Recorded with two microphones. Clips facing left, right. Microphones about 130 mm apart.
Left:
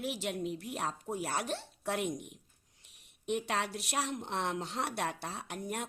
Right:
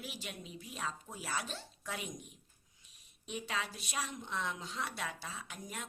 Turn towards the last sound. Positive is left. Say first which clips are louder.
# left 7 dB
turn(degrees=65)  # may be behind; listen again after turning